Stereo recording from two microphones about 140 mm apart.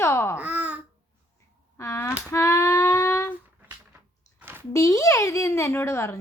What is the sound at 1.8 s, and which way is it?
Speech, 20° left (ahead or behind).